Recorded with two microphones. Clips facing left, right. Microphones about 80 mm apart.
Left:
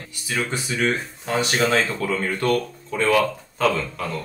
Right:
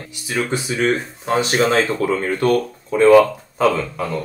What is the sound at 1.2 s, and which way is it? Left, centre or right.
Speech, right.